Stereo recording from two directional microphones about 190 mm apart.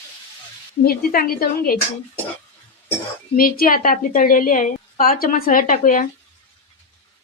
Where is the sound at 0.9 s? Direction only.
50° left (ahead or behind).